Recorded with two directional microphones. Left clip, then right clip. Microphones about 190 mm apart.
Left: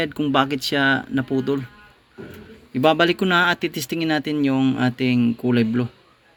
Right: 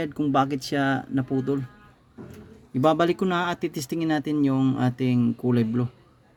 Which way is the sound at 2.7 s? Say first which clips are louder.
Left 4 dB; 20° right (ahead or behind).